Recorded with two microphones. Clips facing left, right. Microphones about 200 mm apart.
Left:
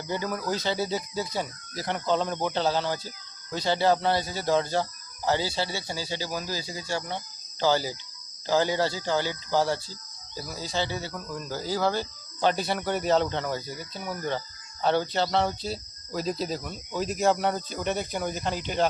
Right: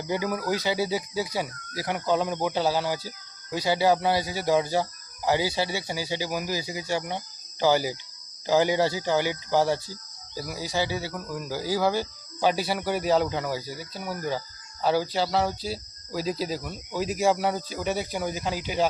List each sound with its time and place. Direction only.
0.1 s speech: 10° right (ahead or behind)